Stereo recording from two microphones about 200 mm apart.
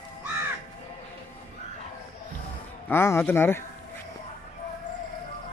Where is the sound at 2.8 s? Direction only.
10° left (ahead or behind).